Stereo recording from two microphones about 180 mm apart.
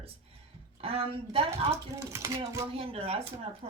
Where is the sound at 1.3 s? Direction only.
30° right (ahead or behind).